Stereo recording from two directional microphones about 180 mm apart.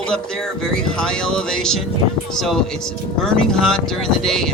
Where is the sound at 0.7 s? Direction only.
5° left (ahead or behind).